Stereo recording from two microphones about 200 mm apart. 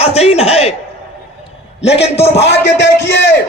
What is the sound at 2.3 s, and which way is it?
A man's voice, 60° left (ahead or behind).